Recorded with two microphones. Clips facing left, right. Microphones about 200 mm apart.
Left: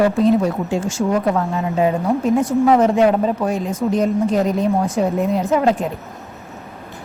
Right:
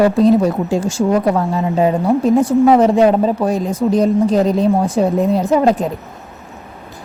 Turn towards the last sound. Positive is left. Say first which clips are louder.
# right 3 dB
turn(degrees=-35)  # may be behind; listen again after turning